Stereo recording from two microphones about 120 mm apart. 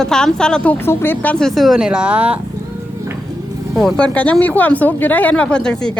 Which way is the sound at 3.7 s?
5° left (ahead or behind).